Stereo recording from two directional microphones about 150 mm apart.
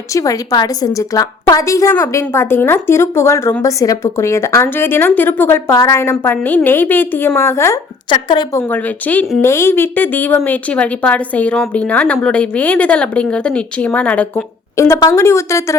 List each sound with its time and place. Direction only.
0.1 s a woman's voice: 20° left (ahead or behind)
8.1 s a woman's voice: 30° left (ahead or behind)
8.5 s a woman's voice: 10° left (ahead or behind)